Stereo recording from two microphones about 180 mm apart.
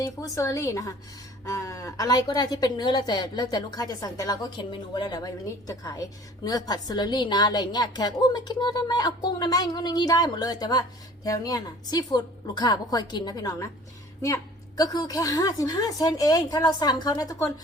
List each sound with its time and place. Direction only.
0.0 s a woman's voice: 20° left (ahead or behind)